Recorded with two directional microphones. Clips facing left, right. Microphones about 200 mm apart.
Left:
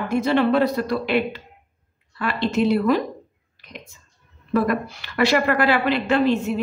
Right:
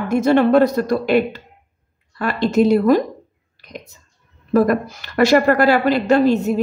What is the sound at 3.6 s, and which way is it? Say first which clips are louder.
Clicking: right 5 dB; 40° right (ahead or behind).